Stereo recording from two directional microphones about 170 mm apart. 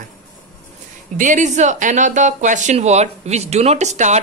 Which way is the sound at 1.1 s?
45° right (ahead or behind).